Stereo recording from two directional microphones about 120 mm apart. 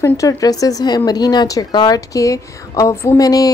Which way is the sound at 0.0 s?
25° left (ahead or behind).